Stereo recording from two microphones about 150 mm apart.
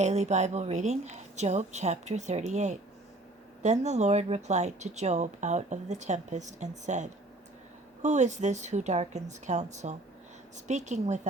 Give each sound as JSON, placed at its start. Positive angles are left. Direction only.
{"t": 0.0, "sound": "speech", "side_deg": -50}